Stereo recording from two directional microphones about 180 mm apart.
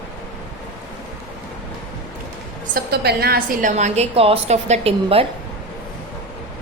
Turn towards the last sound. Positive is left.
turn(degrees=-30)  # may be behind; listen again after turning